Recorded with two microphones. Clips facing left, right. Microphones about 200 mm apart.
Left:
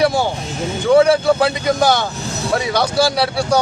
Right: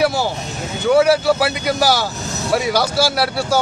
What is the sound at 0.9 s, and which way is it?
A man's voice, 5° right (ahead or behind).